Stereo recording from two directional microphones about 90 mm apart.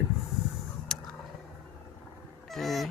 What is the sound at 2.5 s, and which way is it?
Goose, centre (ahead or behind).